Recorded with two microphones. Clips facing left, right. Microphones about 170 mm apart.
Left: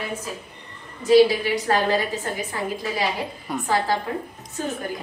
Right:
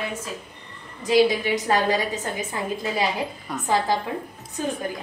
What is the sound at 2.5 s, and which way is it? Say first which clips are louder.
Speech: even; 20° right (ahead or behind).